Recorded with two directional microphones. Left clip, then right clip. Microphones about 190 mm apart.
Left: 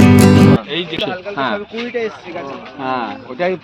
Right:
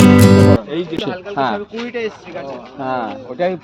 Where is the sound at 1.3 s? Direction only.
70° right (ahead or behind).